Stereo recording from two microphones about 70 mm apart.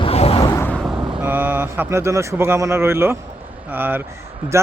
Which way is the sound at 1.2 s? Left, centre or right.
Right.